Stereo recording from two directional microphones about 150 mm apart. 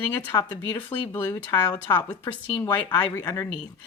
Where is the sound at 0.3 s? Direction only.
25° left (ahead or behind).